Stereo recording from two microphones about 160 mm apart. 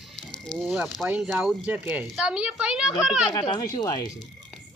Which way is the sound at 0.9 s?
10° right (ahead or behind).